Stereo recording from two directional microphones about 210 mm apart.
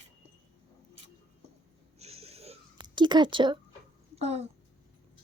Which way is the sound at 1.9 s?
30° right (ahead or behind).